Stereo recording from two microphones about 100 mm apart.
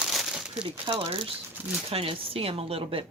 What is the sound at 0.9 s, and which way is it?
Speech, 70° right (ahead or behind).